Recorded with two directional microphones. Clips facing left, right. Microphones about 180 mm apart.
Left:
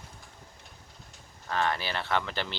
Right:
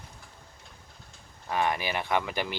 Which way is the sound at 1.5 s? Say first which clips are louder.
Right 2 dB; 15° right (ahead or behind).